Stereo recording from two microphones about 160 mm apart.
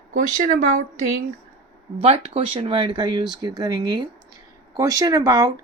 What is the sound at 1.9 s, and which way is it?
A woman's voice, 40° right (ahead or behind).